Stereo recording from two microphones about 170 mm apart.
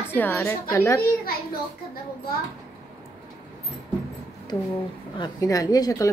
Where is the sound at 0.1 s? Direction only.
15° left (ahead or behind).